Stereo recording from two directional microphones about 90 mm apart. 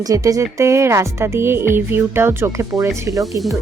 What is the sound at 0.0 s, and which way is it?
Speech, 40° right (ahead or behind).